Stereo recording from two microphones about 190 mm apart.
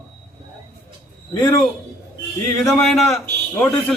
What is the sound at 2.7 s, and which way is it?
A man's voice, centre (ahead or behind).